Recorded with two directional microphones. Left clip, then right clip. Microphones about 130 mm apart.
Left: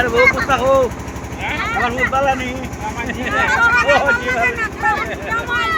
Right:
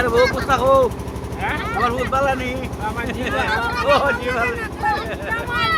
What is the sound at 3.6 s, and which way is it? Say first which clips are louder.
Speech: left 5 dB; 20° right (ahead or behind).